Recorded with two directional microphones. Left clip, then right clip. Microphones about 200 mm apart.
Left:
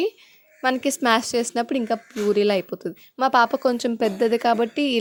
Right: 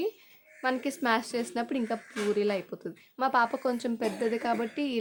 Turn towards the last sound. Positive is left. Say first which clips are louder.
# left 10 dB
turn(degrees=40)  # may be behind; listen again after turning